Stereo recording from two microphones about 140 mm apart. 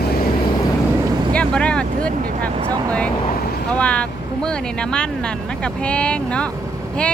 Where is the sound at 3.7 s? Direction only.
10° left (ahead or behind).